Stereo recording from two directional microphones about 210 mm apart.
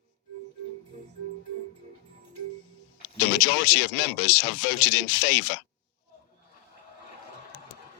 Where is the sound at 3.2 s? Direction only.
55° left (ahead or behind).